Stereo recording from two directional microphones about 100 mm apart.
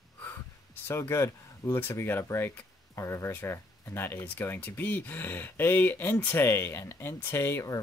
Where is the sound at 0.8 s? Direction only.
25° left (ahead or behind).